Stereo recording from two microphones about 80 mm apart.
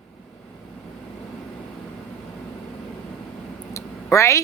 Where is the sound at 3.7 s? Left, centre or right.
Left.